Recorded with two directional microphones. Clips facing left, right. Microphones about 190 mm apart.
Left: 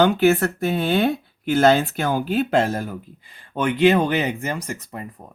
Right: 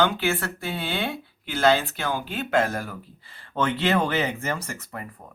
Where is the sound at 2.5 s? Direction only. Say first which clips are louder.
Left 3 dB; 25° left (ahead or behind).